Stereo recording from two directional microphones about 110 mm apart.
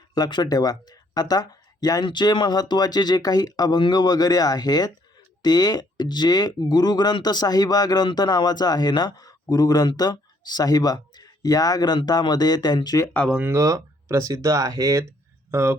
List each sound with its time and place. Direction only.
0.1 s speech: 40° left (ahead or behind)
13.4 s speech: 25° right (ahead or behind)